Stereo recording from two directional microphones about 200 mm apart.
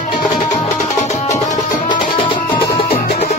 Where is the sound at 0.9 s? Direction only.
35° left (ahead or behind).